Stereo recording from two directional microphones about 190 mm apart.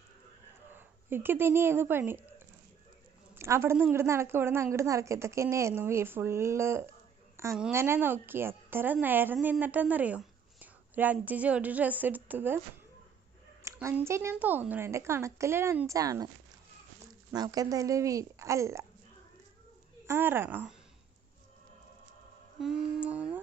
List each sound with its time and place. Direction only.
0.7 s a woman's voice: 10° right (ahead or behind)
3.3 s speech: 15° right (ahead or behind)
13.7 s speech: 10° right (ahead or behind)
17.3 s speech: 20° right (ahead or behind)
20.1 s speech: 10° right (ahead or behind)
22.6 s a sound: 5° right (ahead or behind)